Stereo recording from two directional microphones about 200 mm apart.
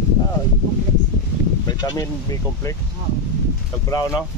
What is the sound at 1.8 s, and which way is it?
Speech, 20° left (ahead or behind).